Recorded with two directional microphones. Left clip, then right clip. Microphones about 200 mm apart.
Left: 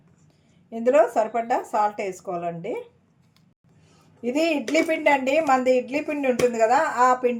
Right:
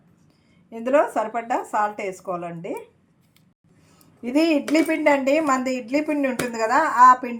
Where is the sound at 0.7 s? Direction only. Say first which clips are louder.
Left 1 dB; 10° left (ahead or behind).